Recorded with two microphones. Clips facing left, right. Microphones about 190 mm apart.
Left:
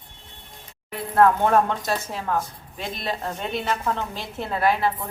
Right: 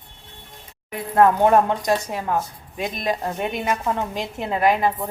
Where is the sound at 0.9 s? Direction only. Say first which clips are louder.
Right 1 dB; 15° right (ahead or behind).